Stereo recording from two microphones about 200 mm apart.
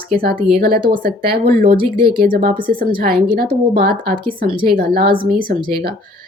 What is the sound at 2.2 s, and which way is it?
Speech, 50° right (ahead or behind).